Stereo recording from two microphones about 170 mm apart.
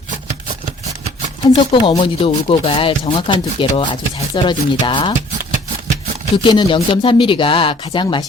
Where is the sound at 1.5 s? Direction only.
25° left (ahead or behind).